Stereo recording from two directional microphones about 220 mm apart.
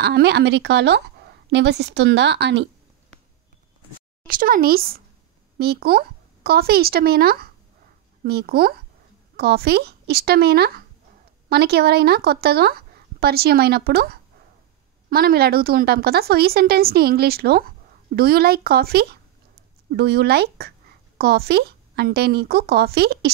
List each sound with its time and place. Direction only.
0.0 s a woman's voice: 50° right (ahead or behind)
4.3 s a woman's voice: 40° right (ahead or behind)